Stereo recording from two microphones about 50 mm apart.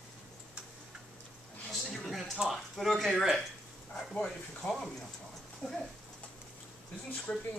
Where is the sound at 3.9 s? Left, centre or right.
Centre.